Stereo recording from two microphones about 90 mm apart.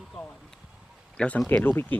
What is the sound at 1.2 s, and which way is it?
Speech, 15° left (ahead or behind).